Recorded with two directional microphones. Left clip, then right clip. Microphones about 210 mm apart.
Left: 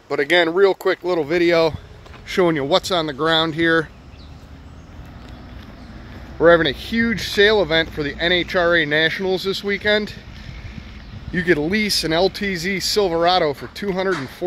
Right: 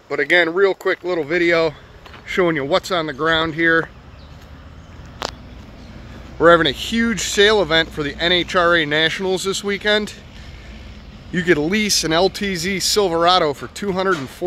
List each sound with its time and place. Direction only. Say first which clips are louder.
0.1 s speech: right 1 dB; 20° left (ahead or behind)
6.3 s speech: right 1 dB; 5° right (ahead or behind)
11.3 s speech: right 1 dB; 5° right (ahead or behind)